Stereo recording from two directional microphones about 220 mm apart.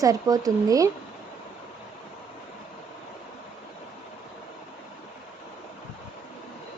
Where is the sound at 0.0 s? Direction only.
15° right (ahead or behind).